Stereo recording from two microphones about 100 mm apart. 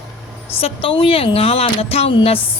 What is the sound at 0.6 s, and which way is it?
A woman's voice, 65° left (ahead or behind).